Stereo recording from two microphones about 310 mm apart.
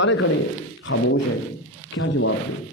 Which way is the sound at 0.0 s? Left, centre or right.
Left.